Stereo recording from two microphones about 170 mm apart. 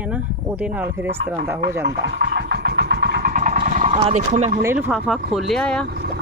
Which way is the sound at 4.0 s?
40° right (ahead or behind).